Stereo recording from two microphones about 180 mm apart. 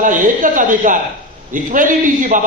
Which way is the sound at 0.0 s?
45° right (ahead or behind).